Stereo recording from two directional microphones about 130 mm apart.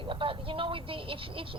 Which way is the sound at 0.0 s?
40° right (ahead or behind).